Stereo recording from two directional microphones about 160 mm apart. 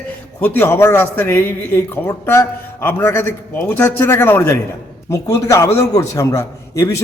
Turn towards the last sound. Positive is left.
turn(degrees=20)  # may be behind; listen again after turning